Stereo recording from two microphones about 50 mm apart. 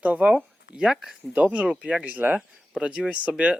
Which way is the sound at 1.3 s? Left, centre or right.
Right.